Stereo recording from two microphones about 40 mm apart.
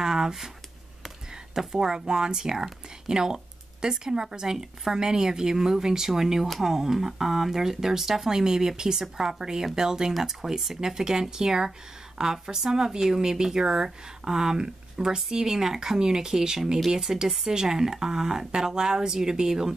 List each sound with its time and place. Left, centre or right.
0.0 s a sound: centre
1.0 s speech: centre
10.1 s speech: centre